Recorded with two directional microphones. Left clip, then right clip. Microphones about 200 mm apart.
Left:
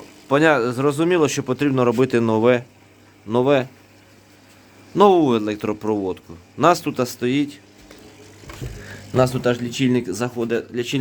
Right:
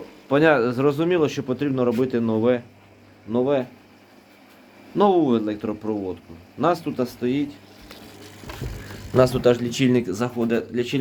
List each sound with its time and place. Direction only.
0.3 s a man's voice: 20° left (ahead or behind)
3.2 s speech: 40° left (ahead or behind)
4.9 s a man's voice: 35° left (ahead or behind)
9.1 s speech: 10° left (ahead or behind)